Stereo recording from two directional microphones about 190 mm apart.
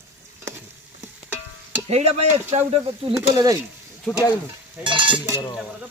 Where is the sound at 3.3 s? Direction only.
20° right (ahead or behind).